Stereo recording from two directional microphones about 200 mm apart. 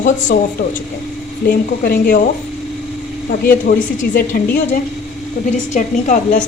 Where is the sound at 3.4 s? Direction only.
45° left (ahead or behind).